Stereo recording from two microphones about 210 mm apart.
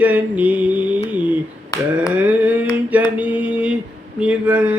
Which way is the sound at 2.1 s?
5° right (ahead or behind).